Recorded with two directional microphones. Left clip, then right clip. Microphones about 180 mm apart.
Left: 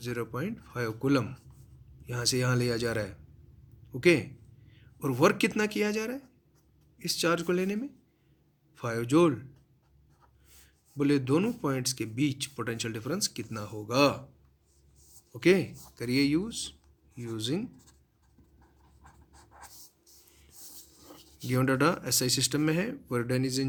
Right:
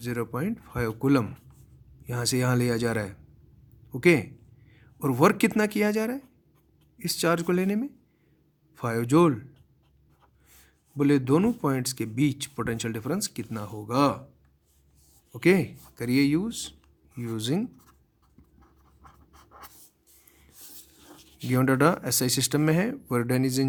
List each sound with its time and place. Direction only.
0.0 s speech: 55° right (ahead or behind)
10.9 s speech: 50° right (ahead or behind)
15.4 s speech: 55° right (ahead or behind)
21.1 s a sound: 15° left (ahead or behind)
21.4 s speech: 50° right (ahead or behind)